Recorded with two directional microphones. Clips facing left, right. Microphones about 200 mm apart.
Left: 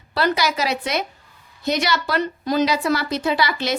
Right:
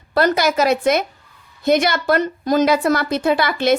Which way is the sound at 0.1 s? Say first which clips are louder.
Right 4 dB; 50° right (ahead or behind).